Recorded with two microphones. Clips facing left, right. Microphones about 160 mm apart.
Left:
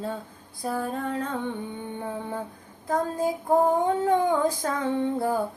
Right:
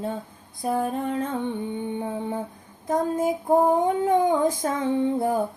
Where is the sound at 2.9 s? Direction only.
20° right (ahead or behind).